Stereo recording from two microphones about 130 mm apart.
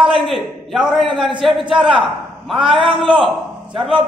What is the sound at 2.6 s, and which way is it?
Speech, 40° right (ahead or behind).